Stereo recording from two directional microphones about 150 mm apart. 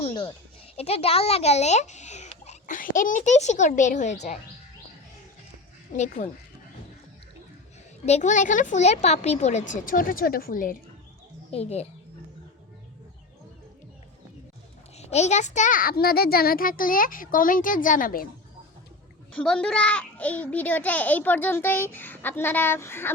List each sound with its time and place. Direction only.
0.1 s a sound: 30° left (ahead or behind)
0.8 s a child's voice: 40° left (ahead or behind)
6.0 s a child's voice: 50° left (ahead or behind)
8.0 s speech: 50° left (ahead or behind); by 10.8 s 65° left (ahead or behind)
11.5 s a child's voice: 45° left (ahead or behind)
14.9 s a child's voice: 45° left (ahead or behind); by 18.3 s 70° left (ahead or behind)
19.3 s a child's voice: 5° left (ahead or behind)